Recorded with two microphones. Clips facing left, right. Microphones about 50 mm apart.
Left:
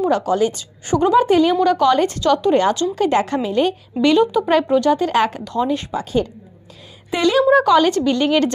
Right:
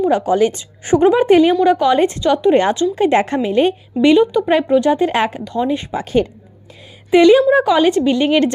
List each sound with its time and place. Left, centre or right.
0.1 s a woman's voice: right
0.4 s speech: right
1.5 s a woman's voice: centre
4.2 s speech: centre
4.5 s a woman's voice: centre
5.3 s a woman's voice: centre
5.9 s speech: right
7.1 s a woman's voice: right
7.5 s a woman's voice: centre